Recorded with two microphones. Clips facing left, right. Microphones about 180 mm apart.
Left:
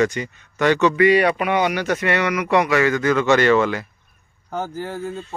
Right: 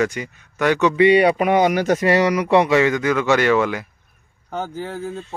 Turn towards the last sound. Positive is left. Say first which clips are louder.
# even
turn(degrees=0)  # may be behind; listen again after turning